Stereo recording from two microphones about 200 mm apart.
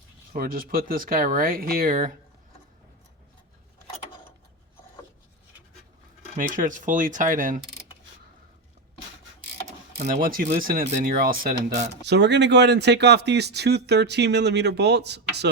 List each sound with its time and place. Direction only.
0.3 s speech: 45° right (ahead or behind)
6.3 s speech: 40° right (ahead or behind)
10.0 s speech: 45° right (ahead or behind)
12.0 s speech: 60° right (ahead or behind)